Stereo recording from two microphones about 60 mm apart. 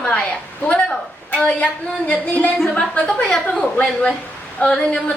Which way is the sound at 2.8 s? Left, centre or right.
Centre.